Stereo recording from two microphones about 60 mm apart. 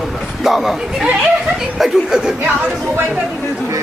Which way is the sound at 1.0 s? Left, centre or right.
Centre.